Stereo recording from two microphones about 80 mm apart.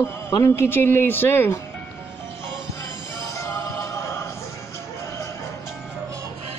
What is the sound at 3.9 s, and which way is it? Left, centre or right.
Music, left.